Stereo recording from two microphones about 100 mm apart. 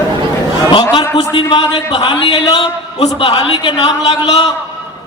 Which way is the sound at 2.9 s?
80° left.